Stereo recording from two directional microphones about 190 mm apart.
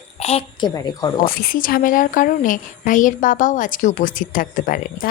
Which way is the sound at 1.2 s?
50° left (ahead or behind).